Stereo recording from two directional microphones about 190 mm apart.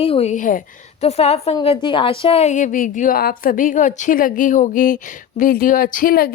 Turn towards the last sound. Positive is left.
turn(degrees=50)  # may be behind; listen again after turning